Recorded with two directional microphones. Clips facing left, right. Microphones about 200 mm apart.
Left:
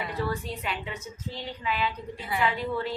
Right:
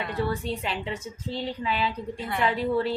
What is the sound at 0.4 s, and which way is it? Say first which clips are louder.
A woman's voice: right 4 dB; 30° right (ahead or behind).